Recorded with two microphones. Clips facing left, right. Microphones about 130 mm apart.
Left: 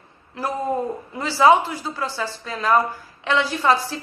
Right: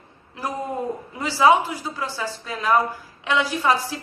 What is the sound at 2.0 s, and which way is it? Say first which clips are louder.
A woman's voice: left 2 dB; 10° right (ahead or behind).